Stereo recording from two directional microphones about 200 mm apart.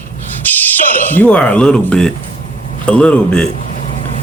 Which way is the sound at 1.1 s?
5° left (ahead or behind).